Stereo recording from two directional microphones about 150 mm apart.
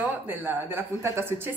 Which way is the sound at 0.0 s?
15° right (ahead or behind).